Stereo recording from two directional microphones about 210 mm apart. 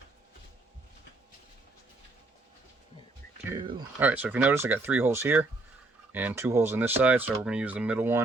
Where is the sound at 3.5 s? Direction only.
20° right (ahead or behind).